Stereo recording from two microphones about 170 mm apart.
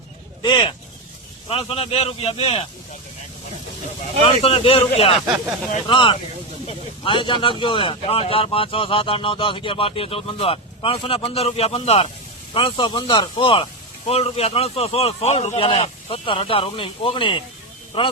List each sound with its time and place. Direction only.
0.4 s speech: 25° left (ahead or behind)
4.2 s speech: 30° left (ahead or behind)